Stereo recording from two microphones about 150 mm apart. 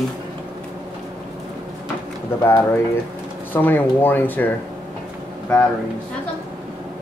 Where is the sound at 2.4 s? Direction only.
15° left (ahead or behind).